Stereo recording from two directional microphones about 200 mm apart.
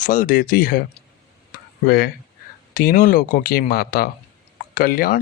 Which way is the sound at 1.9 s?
50° left (ahead or behind).